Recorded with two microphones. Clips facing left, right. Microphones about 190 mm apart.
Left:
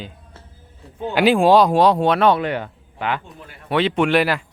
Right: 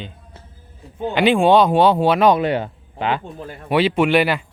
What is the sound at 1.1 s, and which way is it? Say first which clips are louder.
Speech: even; centre (ahead or behind).